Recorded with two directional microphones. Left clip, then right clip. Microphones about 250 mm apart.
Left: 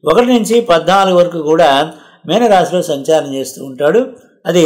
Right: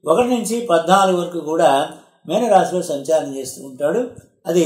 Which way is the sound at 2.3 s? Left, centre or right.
Centre.